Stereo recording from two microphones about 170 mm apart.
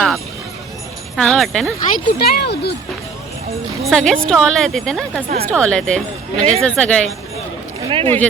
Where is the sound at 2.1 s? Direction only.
65° left (ahead or behind).